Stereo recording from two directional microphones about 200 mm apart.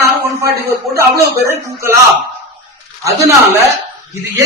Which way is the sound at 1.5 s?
15° right (ahead or behind).